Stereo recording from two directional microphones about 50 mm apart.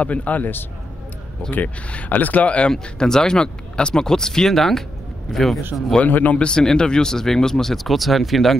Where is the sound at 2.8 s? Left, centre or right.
Centre.